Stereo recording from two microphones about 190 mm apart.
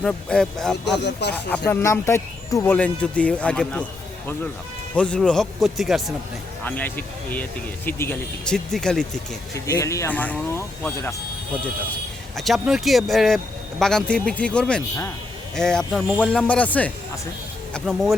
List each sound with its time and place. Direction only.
0.0 s speech: 5° left (ahead or behind)
4.9 s speech: 5° left (ahead or behind)
9.6 s speech: 15° left (ahead or behind)
12.4 s speech: centre (ahead or behind)